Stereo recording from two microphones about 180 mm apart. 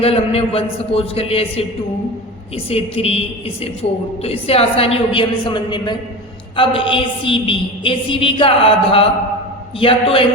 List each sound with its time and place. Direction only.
0.0 s a woman's voice: 35° left (ahead or behind)
2.6 s a woman's voice: 35° left (ahead or behind)